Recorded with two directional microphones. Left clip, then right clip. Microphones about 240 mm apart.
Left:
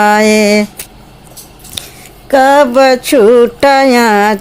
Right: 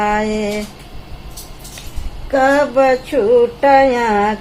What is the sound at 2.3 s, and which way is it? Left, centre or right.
Speech, left.